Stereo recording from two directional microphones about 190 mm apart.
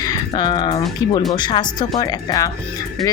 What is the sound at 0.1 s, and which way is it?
Speech, 20° left (ahead or behind).